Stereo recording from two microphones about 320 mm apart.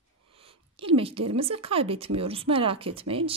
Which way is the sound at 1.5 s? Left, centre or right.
Centre.